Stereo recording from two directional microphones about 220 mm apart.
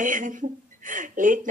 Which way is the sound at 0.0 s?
35° right (ahead or behind).